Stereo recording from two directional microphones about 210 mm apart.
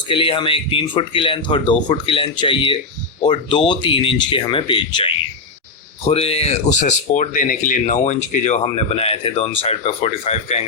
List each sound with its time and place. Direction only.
0.1 s speech: 25° left (ahead or behind)